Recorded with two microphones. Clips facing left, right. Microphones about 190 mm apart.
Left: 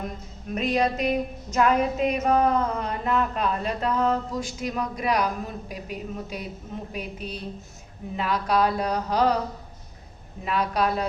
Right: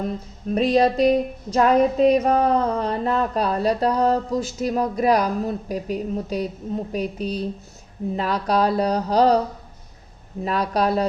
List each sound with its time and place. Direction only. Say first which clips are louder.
0.5 s music: right 6 dB; 35° right (ahead or behind)
10.4 s music: right 3 dB; 35° right (ahead or behind)